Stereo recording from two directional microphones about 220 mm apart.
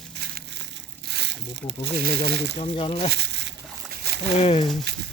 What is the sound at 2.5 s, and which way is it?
Speech, 25° left (ahead or behind).